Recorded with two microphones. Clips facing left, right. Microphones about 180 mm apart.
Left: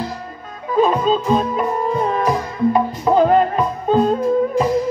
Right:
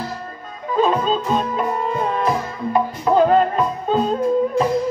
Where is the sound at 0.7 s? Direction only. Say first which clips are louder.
Left 2 dB; 10° left (ahead or behind).